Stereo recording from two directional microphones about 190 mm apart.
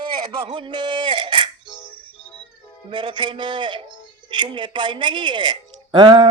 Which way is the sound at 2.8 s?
25° right (ahead or behind).